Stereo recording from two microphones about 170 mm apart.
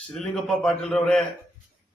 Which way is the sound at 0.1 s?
Centre (ahead or behind).